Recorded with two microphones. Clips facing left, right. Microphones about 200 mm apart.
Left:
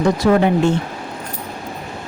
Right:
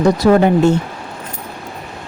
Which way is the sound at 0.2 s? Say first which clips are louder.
Right 3 dB; 40° right (ahead or behind).